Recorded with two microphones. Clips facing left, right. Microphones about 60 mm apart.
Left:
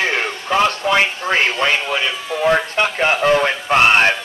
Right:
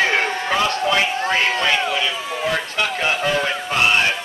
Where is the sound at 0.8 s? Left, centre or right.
Left.